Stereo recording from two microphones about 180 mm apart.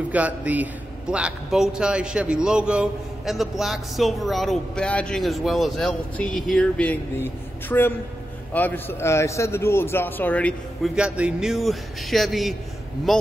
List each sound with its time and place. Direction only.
0.1 s a man's voice: 10° right (ahead or behind); by 10.9 s 10° left (ahead or behind)
11.0 s a man's voice: 5° right (ahead or behind)